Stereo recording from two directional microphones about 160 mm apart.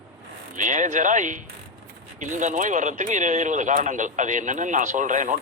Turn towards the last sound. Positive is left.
turn(degrees=-50)  # may be behind; listen again after turning